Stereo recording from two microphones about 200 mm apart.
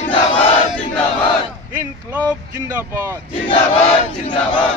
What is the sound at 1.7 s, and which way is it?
A man's voice, 15° right (ahead or behind).